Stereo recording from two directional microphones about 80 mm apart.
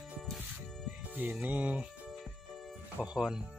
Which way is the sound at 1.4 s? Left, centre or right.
Centre.